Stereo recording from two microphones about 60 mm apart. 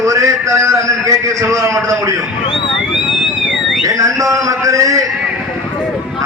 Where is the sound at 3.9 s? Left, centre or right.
Right.